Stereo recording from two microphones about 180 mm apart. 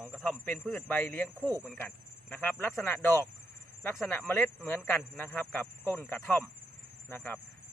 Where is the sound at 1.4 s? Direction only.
15° right (ahead or behind).